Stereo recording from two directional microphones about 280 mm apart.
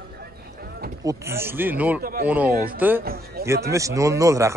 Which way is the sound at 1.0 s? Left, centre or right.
Centre.